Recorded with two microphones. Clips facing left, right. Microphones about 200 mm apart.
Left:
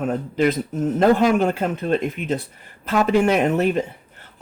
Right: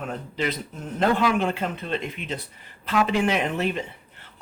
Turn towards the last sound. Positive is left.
turn(degrees=45)  # may be behind; listen again after turning